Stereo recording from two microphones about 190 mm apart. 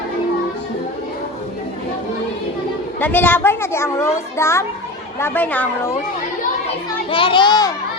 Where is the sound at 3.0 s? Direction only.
10° left (ahead or behind).